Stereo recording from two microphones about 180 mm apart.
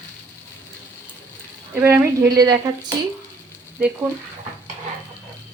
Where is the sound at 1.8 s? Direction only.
10° right (ahead or behind).